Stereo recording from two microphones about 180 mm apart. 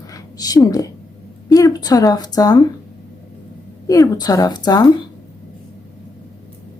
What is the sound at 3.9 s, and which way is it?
Speech, 20° left (ahead or behind).